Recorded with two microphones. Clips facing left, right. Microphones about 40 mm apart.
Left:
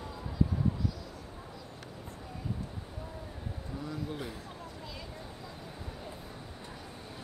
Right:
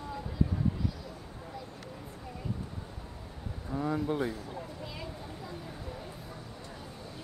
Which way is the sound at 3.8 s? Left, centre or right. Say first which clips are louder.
Right 9 dB; right.